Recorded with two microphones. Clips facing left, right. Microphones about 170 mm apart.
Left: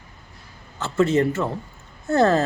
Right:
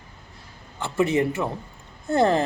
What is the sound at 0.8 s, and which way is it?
A man's voice, 15° right (ahead or behind).